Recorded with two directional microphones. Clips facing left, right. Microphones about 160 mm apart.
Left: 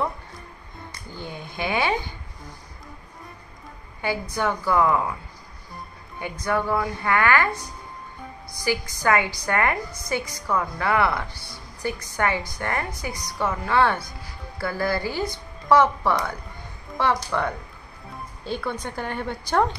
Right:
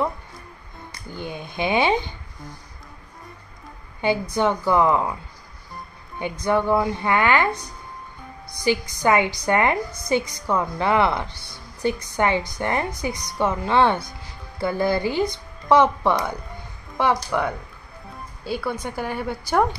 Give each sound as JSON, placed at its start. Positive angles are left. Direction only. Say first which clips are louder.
{"t": 1.1, "sound": "a woman's voice", "louder": "right 4 dB", "side_deg": -15}
{"t": 4.0, "sound": "a woman's voice", "louder": "right 5 dB", "side_deg": -20}
{"t": 6.4, "sound": "a woman's voice", "louder": "right 4 dB", "side_deg": -20}
{"t": 8.6, "sound": "a woman's voice", "louder": "right 3 dB", "side_deg": -20}